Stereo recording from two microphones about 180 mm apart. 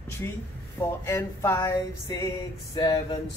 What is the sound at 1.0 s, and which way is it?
A man's voice, 15° left (ahead or behind).